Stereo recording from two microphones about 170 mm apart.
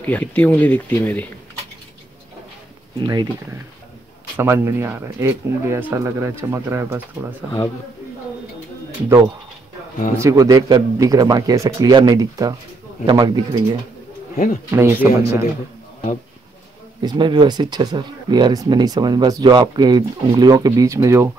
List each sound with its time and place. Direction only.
0.0 s speech: 10° left (ahead or behind)
3.0 s speech: 25° right (ahead or behind)
4.4 s speech: 15° right (ahead or behind)
10.1 s speech: 20° right (ahead or behind)
14.3 s speech: 50° left (ahead or behind)
14.7 s speech: 15° right (ahead or behind)
17.0 s speech: 25° right (ahead or behind)